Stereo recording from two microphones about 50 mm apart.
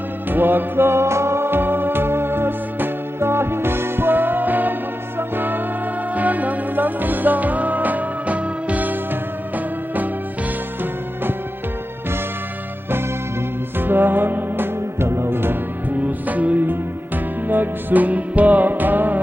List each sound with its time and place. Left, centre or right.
0.3 s music: right
6.1 s music: right
13.7 s music: right
16.0 s music: right